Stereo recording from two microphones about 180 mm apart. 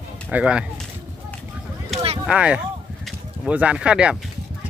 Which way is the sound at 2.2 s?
5° right (ahead or behind).